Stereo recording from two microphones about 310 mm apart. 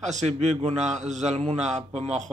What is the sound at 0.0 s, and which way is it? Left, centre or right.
A man's voice, right.